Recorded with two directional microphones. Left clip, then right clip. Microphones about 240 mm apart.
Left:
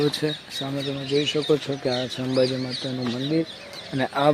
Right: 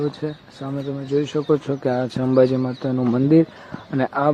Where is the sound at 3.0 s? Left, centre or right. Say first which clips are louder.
Right 10 dB; centre.